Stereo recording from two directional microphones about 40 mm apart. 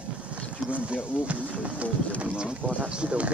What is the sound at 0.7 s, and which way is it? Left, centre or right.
Speech, right.